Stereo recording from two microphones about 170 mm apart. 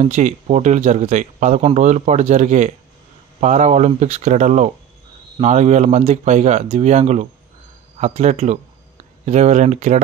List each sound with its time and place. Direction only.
0.0 s speech: 45° right (ahead or behind)